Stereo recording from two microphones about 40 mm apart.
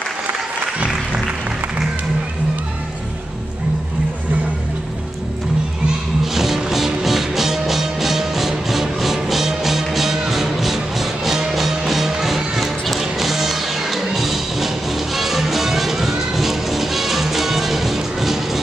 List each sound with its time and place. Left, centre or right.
6.3 s music: centre